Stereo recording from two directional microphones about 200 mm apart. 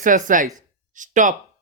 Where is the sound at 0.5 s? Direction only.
40° right (ahead or behind).